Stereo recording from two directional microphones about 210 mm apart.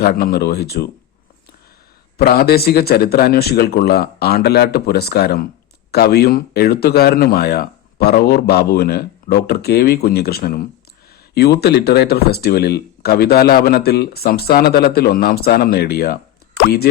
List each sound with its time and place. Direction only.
0.0 s speech: 45° left (ahead or behind)
2.1 s speech: 45° left (ahead or behind)